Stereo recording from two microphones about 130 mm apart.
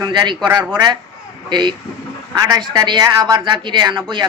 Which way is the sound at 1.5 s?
35° right (ahead or behind).